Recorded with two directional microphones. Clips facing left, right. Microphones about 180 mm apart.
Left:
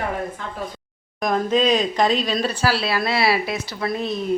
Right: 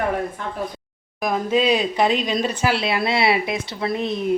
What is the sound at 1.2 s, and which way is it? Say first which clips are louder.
Speech: left 1 dB; 5° right (ahead or behind).